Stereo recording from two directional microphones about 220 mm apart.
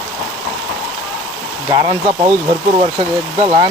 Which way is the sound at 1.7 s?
20° right (ahead or behind).